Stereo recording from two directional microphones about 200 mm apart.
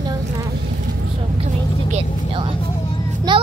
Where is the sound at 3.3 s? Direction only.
20° right (ahead or behind).